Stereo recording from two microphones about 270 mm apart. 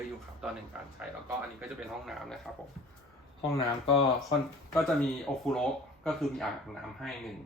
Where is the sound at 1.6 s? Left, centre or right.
Centre.